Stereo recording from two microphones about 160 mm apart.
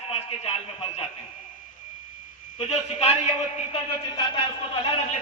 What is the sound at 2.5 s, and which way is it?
Speech, 40° left (ahead or behind).